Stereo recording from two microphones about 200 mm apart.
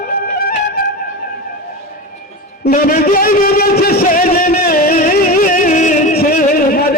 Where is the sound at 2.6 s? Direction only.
50° left (ahead or behind).